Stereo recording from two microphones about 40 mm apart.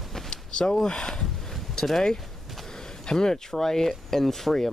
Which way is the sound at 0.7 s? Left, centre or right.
Centre.